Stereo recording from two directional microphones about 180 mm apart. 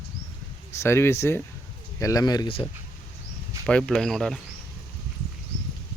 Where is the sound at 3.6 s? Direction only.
5° left (ahead or behind).